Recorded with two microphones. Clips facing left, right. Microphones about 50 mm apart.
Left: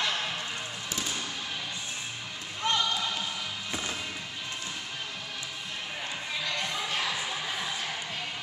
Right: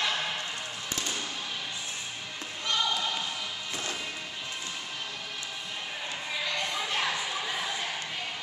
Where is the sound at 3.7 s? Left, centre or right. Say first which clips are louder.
Left 1 dB; centre.